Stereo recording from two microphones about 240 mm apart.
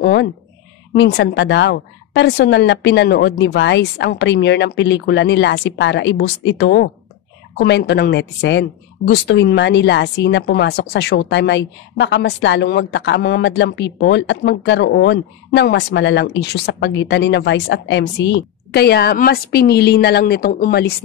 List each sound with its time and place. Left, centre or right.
0.0 s a woman's voice: left